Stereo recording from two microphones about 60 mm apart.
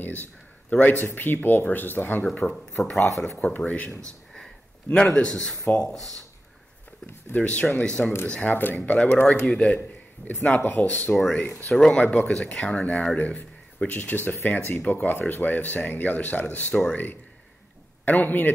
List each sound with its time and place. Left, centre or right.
0.0 s a sound: left
1.0 s speech: left
2.4 s a man's voice: centre
3.2 s speech: left
5.0 s a man's voice: centre
7.2 s a man's voice: left
8.5 s speech: left
10.2 s speech: left
11.7 s a man's voice: centre
12.0 s speech: left
12.3 s speech: centre; by 18.5 s left